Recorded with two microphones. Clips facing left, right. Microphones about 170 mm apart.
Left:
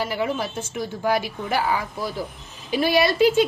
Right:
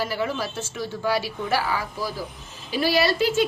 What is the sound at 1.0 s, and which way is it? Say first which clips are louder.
Speech: left 2 dB; 50° left (ahead or behind).